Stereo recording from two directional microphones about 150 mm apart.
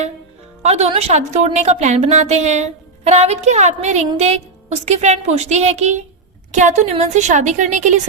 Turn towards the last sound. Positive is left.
turn(degrees=-55)  # may be behind; listen again after turning